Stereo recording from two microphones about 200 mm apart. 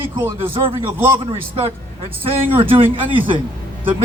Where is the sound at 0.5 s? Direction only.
25° right (ahead or behind).